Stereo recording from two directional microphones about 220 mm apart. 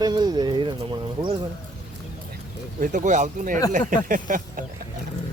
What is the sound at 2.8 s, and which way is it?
Speech, 35° right (ahead or behind).